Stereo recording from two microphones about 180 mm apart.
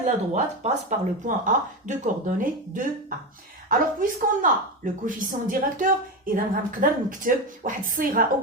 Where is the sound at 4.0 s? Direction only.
50° right (ahead or behind).